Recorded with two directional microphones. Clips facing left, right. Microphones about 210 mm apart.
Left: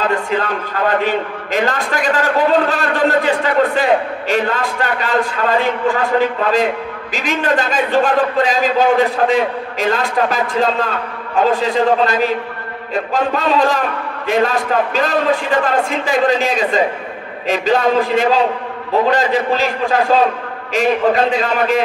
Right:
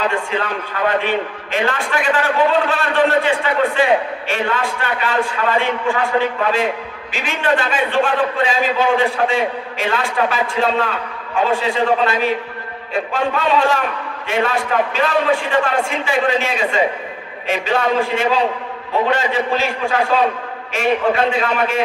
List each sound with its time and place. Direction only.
0.1 s a man's voice: 40° left (ahead or behind)